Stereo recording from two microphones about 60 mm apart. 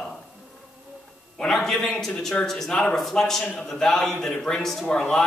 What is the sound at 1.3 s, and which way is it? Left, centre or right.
A man's voice, centre.